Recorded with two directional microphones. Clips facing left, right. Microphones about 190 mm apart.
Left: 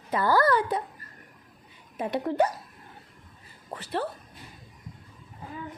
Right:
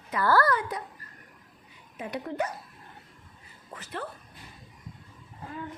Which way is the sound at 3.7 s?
35° left (ahead or behind).